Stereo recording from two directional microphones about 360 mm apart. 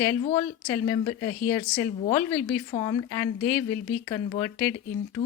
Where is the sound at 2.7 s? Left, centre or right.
Centre.